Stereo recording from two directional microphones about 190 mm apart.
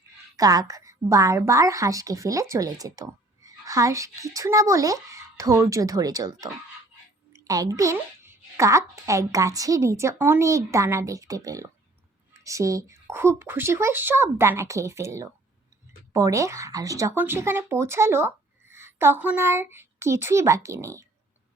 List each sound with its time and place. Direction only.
0.3 s a woman's voice: 20° right (ahead or behind)